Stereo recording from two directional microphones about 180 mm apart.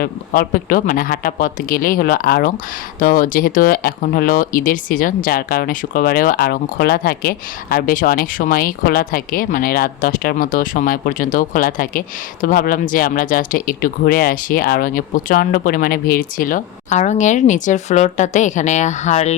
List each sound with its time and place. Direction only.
0.0 s speech: 50° left (ahead or behind)